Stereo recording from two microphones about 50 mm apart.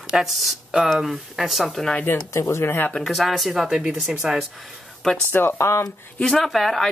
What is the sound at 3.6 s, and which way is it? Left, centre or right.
Speech, centre.